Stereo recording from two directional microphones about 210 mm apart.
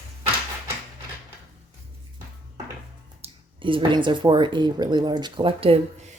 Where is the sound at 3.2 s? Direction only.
25° right (ahead or behind).